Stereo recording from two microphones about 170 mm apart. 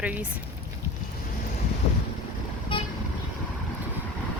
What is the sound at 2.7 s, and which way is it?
Vehicle, 30° left (ahead or behind).